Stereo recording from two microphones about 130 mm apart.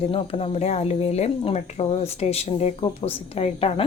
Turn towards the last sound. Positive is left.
turn(degrees=50)  # may be behind; listen again after turning